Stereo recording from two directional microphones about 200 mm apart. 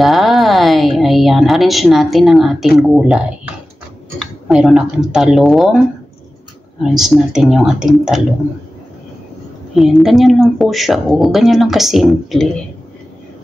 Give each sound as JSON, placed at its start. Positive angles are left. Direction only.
{"t": 0.0, "sound": "a woman's voice", "side_deg": 0}
{"t": 6.8, "sound": "a woman's voice", "side_deg": 0}
{"t": 9.8, "sound": "a woman's voice", "side_deg": 0}